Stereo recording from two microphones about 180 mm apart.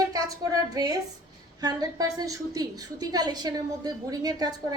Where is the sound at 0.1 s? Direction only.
20° right (ahead or behind).